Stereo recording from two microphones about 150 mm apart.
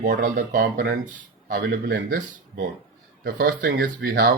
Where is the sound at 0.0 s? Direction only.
55° right (ahead or behind).